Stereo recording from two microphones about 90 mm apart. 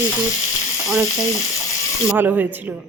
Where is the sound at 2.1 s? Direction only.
20° right (ahead or behind).